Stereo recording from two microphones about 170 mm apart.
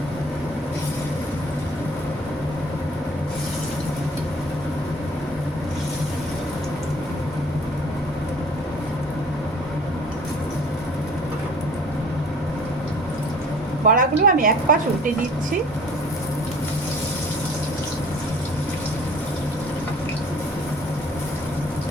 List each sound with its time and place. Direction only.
13.8 s speech: 55° right (ahead or behind)